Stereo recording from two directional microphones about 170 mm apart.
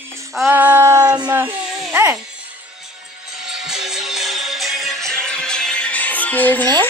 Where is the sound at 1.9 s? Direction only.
15° right (ahead or behind); by 6.6 s 10° left (ahead or behind).